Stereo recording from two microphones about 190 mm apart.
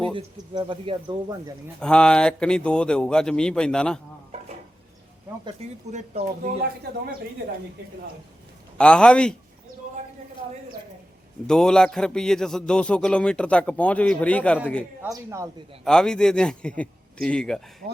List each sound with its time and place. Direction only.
0.0 s speech: 25° right (ahead or behind)
1.8 s speech: 5° left (ahead or behind)
5.5 s speech: 35° right (ahead or behind)
8.8 s speech: 5° left (ahead or behind)
11.4 s speech: 5° left (ahead or behind)
15.1 s speech: 15° right (ahead or behind)
15.8 s speech: 5° left (ahead or behind)